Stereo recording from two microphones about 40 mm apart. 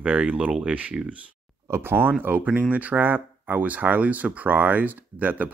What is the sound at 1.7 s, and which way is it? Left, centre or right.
Speech, right.